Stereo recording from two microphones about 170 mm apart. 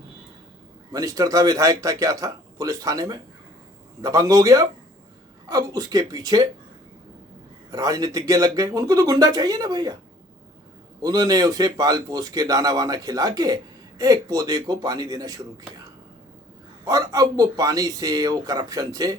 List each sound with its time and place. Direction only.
0.9 s a man's voice: 20° right (ahead or behind)
7.7 s a man's voice: 20° right (ahead or behind)
11.0 s a man's voice: 20° right (ahead or behind)
16.8 s a man's voice: 20° right (ahead or behind)